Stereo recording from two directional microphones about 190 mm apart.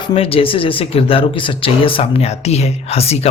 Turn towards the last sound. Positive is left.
turn(degrees=35)  # may be behind; listen again after turning